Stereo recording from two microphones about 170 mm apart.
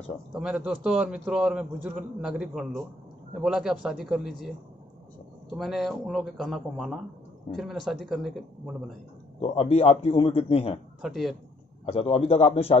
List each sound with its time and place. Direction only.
0.3 s a man's voice: 5° right (ahead or behind)
5.5 s a man's voice: centre (ahead or behind)
9.4 s a man's voice: 35° left (ahead or behind)
11.0 s a man's voice: centre (ahead or behind)
11.8 s a man's voice: 35° left (ahead or behind)